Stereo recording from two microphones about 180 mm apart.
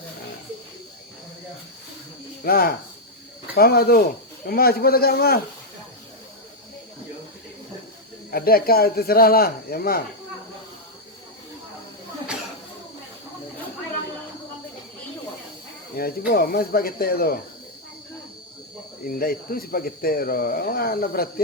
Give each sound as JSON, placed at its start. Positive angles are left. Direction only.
{"t": 2.4, "sound": "speech", "side_deg": 55}
{"t": 8.3, "sound": "speech", "side_deg": 55}
{"t": 16.0, "sound": "speech", "side_deg": 55}
{"t": 19.0, "sound": "speech", "side_deg": 55}